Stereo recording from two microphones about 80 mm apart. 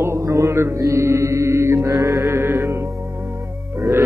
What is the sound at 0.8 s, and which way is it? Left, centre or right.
Chant, right.